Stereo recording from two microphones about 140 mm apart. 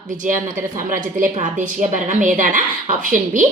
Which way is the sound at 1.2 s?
60° right (ahead or behind).